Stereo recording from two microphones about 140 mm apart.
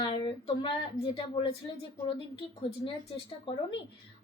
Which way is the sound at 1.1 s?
40° left (ahead or behind).